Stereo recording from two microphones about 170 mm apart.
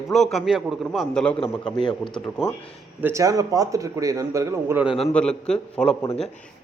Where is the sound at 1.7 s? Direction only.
30° left (ahead or behind).